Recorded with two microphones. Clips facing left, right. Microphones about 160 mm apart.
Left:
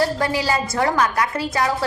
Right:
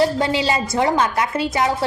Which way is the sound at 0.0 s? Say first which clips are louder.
Right 2 dB; 20° right (ahead or behind).